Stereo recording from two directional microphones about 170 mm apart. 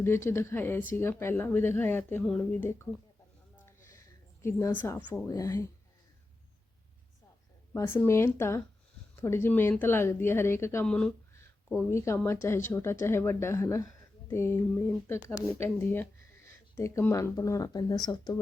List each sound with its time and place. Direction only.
0.0 s speech: 15° left (ahead or behind)
4.4 s speech: 10° left (ahead or behind)
5.3 s speech: 20° left (ahead or behind)
7.7 s speech: 15° left (ahead or behind)
11.9 s speech: 15° left (ahead or behind)